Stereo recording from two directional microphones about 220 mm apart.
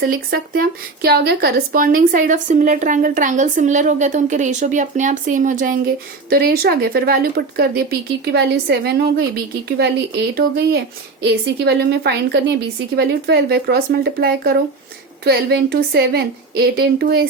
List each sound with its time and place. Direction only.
0.0 s speech: 40° right (ahead or behind)